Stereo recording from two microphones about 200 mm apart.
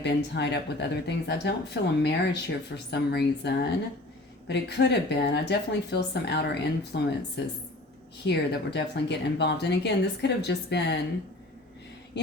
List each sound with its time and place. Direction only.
0.0 s speech: 60° left (ahead or behind)
8.3 s speech: 60° left (ahead or behind)
12.1 s a sound: 60° left (ahead or behind)